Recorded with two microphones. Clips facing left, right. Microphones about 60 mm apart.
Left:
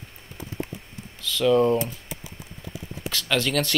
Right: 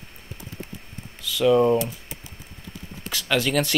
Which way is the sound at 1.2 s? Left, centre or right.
Centre.